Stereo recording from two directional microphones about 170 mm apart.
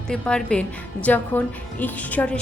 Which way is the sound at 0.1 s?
5° left (ahead or behind).